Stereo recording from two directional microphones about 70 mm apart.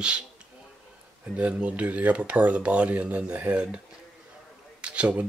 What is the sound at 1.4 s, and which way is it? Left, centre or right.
Speech, centre.